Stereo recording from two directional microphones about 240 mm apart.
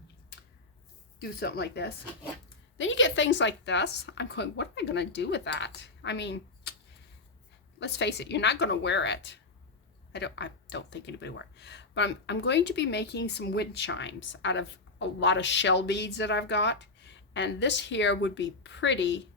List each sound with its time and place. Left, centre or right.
1.2 s a woman's voice: left
7.8 s speech: left